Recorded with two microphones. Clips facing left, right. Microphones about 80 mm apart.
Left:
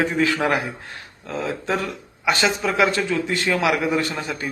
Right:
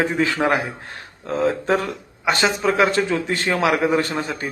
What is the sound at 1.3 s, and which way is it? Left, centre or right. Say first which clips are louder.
A man's voice: right 5 dB; right.